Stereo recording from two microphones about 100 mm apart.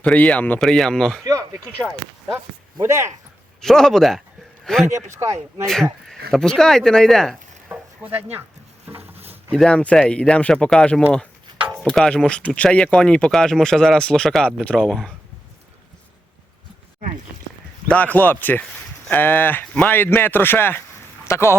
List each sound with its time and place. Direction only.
0.0 s speech: 15° left (ahead or behind)
0.6 s speech: 5° left (ahead or behind)
1.2 s a sound: 40° right (ahead or behind)
1.8 s speech: 5° left (ahead or behind)
2.8 s speech: 25° right (ahead or behind)
3.6 s speech: 5° left (ahead or behind)
4.9 s speech: 30° right (ahead or behind)
5.6 s speech: 5° left (ahead or behind)
7.7 s a sound: 20° right (ahead or behind)
9.0 s a sound: 90° right
9.5 s speech: 5° left (ahead or behind)
17.8 s speech: 15° left (ahead or behind)